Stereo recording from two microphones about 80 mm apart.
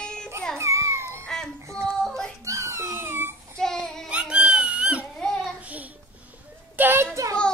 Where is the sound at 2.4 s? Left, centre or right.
Right.